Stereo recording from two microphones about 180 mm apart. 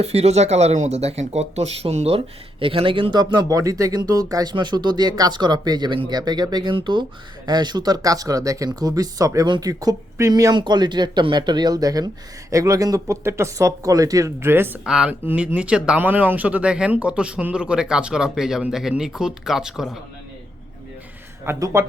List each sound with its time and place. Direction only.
0.0 s speech: 35° right (ahead or behind); by 20.0 s centre (ahead or behind)
21.4 s speech: 15° right (ahead or behind)